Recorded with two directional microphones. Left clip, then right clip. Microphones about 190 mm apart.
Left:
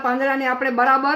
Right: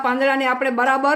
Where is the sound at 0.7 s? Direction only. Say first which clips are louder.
Left 1 dB; 20° left (ahead or behind).